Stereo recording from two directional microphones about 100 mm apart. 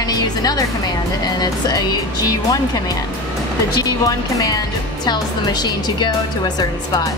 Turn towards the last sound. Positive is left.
turn(degrees=45)  # may be behind; listen again after turning